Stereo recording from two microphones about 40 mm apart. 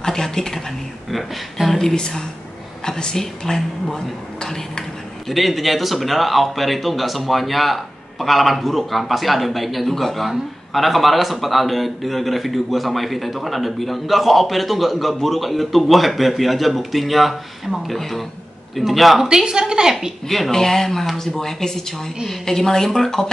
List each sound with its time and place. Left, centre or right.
0.0 s a woman's voice: centre
1.1 s speech: centre
1.8 s speech: centre
5.3 s speech: centre
19.2 s a woman's voice: centre
20.2 s speech: centre